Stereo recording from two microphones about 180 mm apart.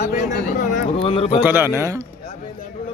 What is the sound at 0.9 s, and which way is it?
Speech, 30° left (ahead or behind).